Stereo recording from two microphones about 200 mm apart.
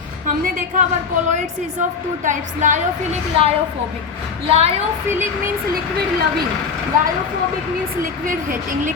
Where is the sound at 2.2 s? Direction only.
40° right (ahead or behind).